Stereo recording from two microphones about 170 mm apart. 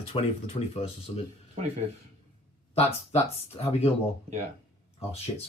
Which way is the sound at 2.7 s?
40° left (ahead or behind).